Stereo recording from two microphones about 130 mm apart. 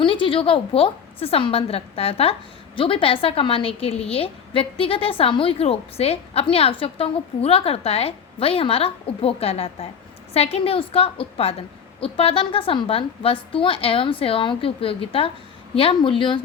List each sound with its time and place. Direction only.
0.0 s a woman's voice: 40° left (ahead or behind)